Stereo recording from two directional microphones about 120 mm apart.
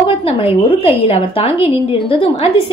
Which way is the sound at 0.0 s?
50° left (ahead or behind).